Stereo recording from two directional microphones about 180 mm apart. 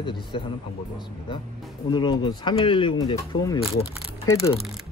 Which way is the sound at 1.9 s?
25° left (ahead or behind).